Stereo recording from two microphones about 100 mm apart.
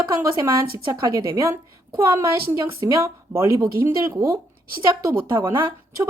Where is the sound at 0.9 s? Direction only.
40° right (ahead or behind).